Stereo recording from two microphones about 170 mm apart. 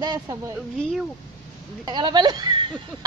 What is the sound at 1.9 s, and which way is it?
Speech, 25° right (ahead or behind).